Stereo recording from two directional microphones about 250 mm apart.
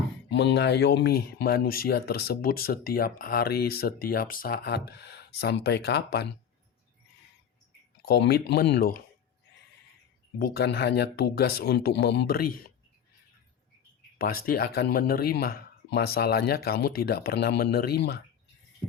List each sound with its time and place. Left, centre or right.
0.3 s speech: left
8.0 s speech: left
10.3 s speech: left
14.2 s speech: left